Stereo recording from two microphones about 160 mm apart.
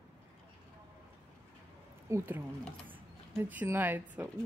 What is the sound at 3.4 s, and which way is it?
Speech, 10° right (ahead or behind).